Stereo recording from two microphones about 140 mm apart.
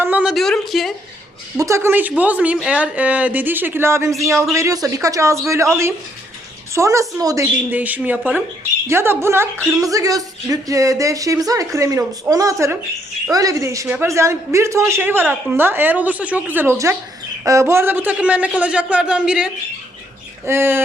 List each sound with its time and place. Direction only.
0.0 s a woman's voice: 10° right (ahead or behind)
1.5 s speech: 20° right (ahead or behind)
7.7 s speech: 10° right (ahead or behind)